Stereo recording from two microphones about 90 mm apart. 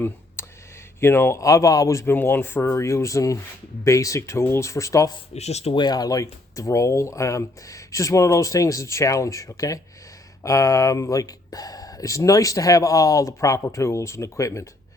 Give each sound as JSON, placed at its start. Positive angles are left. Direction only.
{"t": 0.4, "sound": "a sound", "side_deg": 30}
{"t": 0.9, "sound": "speech", "side_deg": 25}
{"t": 2.1, "sound": "speech", "side_deg": 25}
{"t": 5.7, "sound": "speech", "side_deg": 50}